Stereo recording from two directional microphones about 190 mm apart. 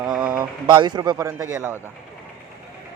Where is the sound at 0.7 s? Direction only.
25° right (ahead or behind).